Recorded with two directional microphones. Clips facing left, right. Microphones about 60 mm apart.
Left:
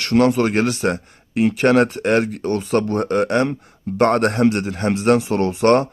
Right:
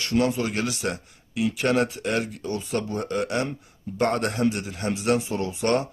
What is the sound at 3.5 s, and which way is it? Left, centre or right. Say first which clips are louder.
Speech: left 9 dB; left.